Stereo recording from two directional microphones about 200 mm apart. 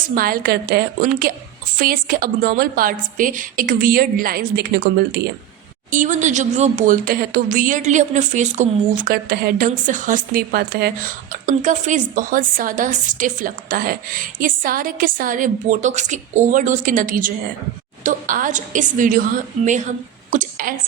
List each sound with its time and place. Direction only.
0.0 s a woman's voice: 45° right (ahead or behind)
5.9 s a woman's voice: 40° right (ahead or behind)